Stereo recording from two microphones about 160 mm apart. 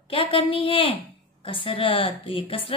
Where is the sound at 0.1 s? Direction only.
35° left (ahead or behind).